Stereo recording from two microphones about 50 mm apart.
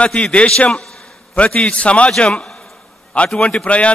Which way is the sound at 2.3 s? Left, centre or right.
Centre.